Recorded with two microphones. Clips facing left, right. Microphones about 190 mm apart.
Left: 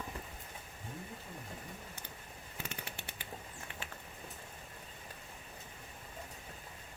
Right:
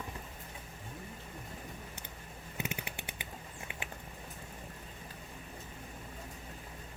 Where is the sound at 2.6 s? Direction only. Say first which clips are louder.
Right 5 dB; 15° right (ahead or behind).